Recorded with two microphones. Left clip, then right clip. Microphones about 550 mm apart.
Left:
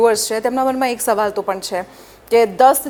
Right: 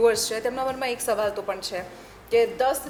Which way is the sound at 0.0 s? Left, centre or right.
Left.